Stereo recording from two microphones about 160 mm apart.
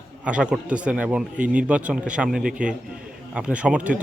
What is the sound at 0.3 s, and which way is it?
Speech, 5° right (ahead or behind).